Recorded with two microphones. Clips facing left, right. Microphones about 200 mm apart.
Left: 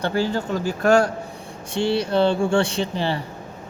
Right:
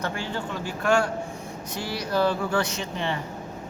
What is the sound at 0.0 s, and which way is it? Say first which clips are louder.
Speech: left 8 dB; 35° left (ahead or behind).